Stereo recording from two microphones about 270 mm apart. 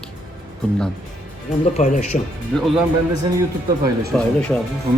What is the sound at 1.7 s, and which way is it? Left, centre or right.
Speech, left.